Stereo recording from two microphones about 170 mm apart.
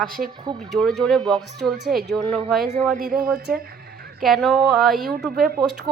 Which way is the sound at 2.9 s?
55° right (ahead or behind).